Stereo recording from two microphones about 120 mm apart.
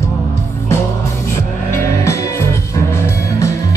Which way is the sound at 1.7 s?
25° left (ahead or behind).